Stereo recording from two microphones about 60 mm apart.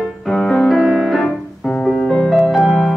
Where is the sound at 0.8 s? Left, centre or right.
Centre.